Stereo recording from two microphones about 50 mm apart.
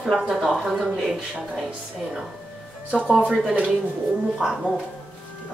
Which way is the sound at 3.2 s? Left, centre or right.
Centre.